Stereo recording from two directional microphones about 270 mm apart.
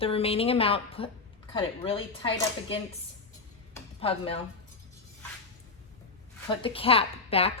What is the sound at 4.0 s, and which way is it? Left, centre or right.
Speech, left.